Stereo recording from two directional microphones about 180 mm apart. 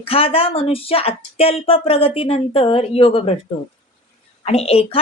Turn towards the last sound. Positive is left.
turn(degrees=35)  # may be behind; listen again after turning